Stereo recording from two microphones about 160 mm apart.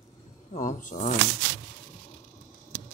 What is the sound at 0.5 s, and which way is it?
Speech, 55° left (ahead or behind).